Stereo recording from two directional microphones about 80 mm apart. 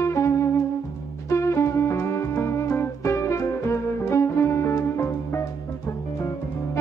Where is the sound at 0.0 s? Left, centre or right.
Left.